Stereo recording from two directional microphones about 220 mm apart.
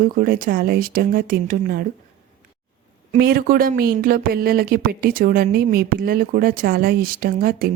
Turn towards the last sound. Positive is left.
turn(degrees=-40)  # may be behind; listen again after turning